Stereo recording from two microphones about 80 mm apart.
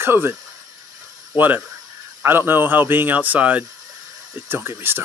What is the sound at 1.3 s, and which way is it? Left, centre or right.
Speech, right.